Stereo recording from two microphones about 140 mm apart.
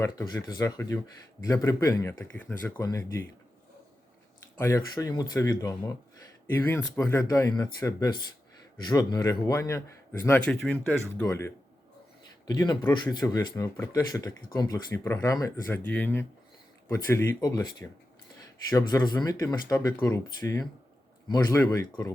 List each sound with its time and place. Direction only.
0.0 s speech: 25° left (ahead or behind)
2.7 s speech: 25° left (ahead or behind)
4.5 s speech: 25° left (ahead or behind)
10.5 s speech: 5° left (ahead or behind)
11.3 s speech: 20° left (ahead or behind)
12.5 s speech: 30° left (ahead or behind)